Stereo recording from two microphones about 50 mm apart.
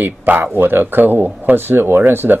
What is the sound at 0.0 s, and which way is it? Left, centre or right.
Speech, right.